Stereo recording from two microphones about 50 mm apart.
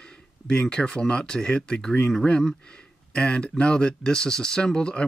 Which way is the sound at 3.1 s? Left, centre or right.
Left.